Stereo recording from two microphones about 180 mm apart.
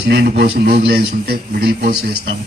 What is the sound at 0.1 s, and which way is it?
A man's voice, 60° right (ahead or behind).